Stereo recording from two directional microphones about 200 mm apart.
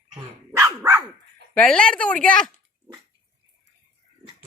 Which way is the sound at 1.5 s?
5° left (ahead or behind).